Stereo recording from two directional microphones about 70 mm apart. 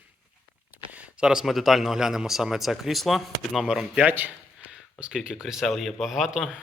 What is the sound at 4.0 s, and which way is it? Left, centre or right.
Speech, right.